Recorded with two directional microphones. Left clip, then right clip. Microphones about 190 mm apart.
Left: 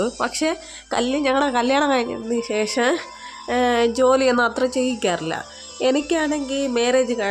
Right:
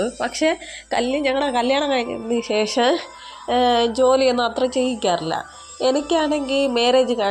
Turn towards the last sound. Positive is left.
turn(degrees=5)  # may be behind; listen again after turning